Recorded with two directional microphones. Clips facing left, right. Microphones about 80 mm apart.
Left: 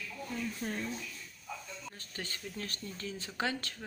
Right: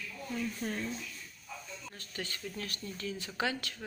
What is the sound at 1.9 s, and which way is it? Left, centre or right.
Speech, left.